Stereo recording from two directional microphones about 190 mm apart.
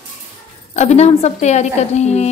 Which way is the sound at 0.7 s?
35° left (ahead or behind).